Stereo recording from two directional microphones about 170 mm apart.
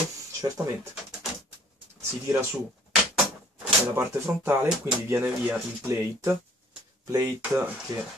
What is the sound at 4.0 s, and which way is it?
Speech, 15° right (ahead or behind).